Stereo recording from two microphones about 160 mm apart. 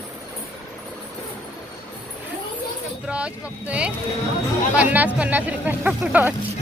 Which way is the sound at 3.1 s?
5° right (ahead or behind).